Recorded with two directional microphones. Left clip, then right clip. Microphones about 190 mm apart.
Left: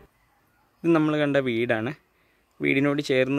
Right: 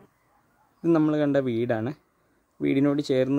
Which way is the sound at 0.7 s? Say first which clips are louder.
Left 1 dB; 5° right (ahead or behind).